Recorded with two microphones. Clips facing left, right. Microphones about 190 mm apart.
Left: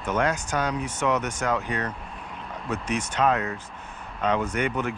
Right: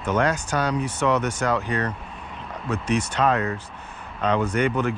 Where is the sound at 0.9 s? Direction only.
10° left (ahead or behind).